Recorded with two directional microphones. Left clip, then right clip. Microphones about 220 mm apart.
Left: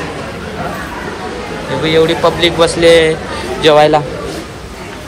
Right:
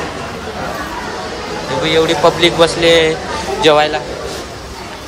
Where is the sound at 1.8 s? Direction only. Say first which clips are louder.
Left 2 dB; 20° right (ahead or behind).